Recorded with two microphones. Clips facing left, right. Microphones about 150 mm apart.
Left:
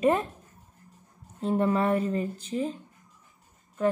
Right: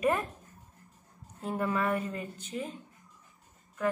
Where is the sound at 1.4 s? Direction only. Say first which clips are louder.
Left 6 dB; 30° left (ahead or behind).